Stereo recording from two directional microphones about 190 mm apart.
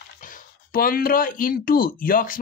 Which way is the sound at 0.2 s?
50° left (ahead or behind).